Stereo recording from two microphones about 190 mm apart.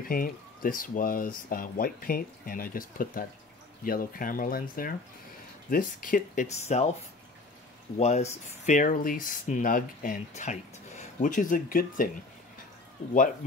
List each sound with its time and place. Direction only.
0.1 s speech: 50° left (ahead or behind)
8.0 s speech: 35° left (ahead or behind)
13.1 s speech: 45° left (ahead or behind)